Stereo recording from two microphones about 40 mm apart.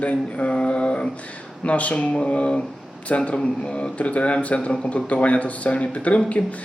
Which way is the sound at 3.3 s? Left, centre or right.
Left.